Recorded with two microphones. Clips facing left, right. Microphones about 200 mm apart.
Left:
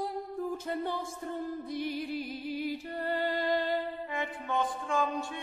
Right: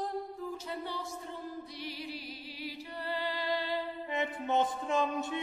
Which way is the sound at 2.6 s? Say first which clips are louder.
Left 4 dB; 50° left (ahead or behind).